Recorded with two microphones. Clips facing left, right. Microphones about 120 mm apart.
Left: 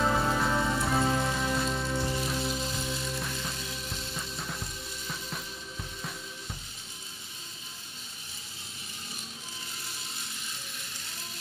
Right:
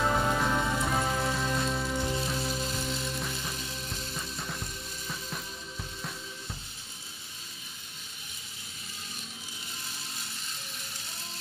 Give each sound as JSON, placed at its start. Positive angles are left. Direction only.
{"t": 0.0, "sound": "music", "side_deg": 0}